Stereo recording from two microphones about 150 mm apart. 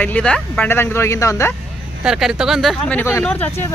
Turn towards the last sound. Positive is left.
turn(degrees=10)  # may be behind; listen again after turning